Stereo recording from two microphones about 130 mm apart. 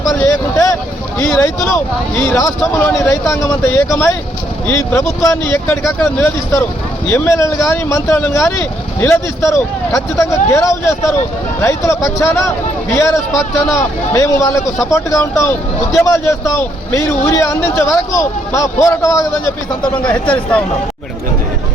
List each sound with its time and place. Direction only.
0.2 s a sound: 25° left (ahead or behind)
2.1 s speech: 20° left (ahead or behind)
19.8 s speech: 10° left (ahead or behind)